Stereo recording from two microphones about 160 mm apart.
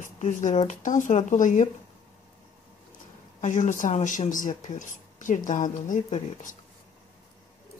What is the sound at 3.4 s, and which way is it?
Speech, 50° left (ahead or behind).